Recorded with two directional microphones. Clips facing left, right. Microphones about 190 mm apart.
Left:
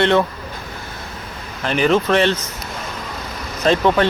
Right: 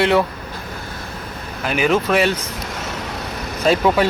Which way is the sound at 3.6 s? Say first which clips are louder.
Even; 10° right (ahead or behind).